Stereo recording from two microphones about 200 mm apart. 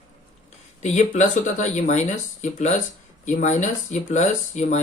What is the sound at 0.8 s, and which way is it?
Speech, 35° left (ahead or behind).